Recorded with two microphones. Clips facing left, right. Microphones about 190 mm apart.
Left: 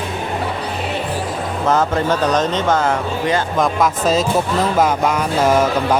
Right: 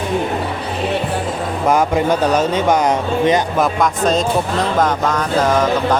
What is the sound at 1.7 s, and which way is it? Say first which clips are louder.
Speech: right 2 dB; 10° right (ahead or behind).